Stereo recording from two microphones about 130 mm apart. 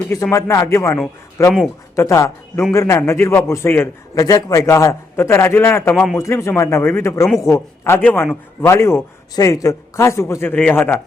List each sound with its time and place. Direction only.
0.1 s a man's voice: 20° left (ahead or behind)